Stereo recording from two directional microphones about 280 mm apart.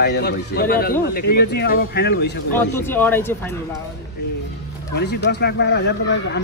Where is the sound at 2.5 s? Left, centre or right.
Centre.